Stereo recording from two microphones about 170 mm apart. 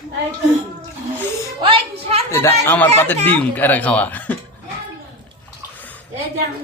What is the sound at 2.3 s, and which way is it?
Speech, 15° left (ahead or behind).